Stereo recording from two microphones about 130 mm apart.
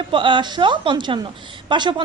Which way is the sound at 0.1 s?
40° right (ahead or behind).